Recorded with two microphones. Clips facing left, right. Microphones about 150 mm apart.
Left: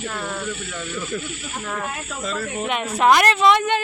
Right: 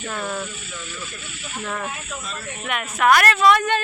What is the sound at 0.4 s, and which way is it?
Speech, 65° left (ahead or behind).